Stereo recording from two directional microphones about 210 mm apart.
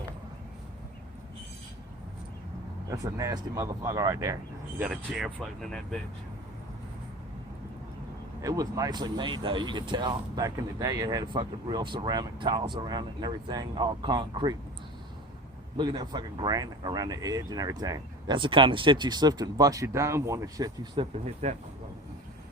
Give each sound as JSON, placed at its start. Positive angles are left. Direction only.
{"t": 2.9, "sound": "speech", "side_deg": -15}
{"t": 4.8, "sound": "speech", "side_deg": -5}
{"t": 8.4, "sound": "speech", "side_deg": -15}
{"t": 15.8, "sound": "speech", "side_deg": -20}